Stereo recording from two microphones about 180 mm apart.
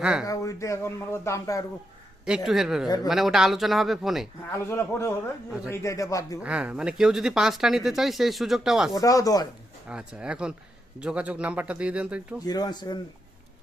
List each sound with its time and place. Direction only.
0.0 s speech: 5° right (ahead or behind)
0.3 s speech: 15° left (ahead or behind)
2.2 s speech: 5° right (ahead or behind)
4.5 s speech: 15° left (ahead or behind)
5.5 s speech: 5° right (ahead or behind)
5.7 s speech: 15° left (ahead or behind)
6.4 s speech: 5° right (ahead or behind)
9.0 s speech: 20° left (ahead or behind)
9.9 s speech: 5° right (ahead or behind)
12.5 s speech: 20° left (ahead or behind)